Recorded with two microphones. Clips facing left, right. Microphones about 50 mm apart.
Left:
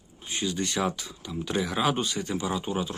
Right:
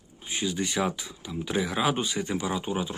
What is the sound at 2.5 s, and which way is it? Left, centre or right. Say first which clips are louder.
Speech: even; centre.